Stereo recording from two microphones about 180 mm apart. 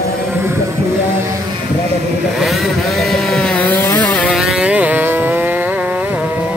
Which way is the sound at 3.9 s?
20° left (ahead or behind).